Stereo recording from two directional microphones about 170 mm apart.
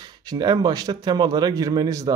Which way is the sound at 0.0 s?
25° right (ahead or behind).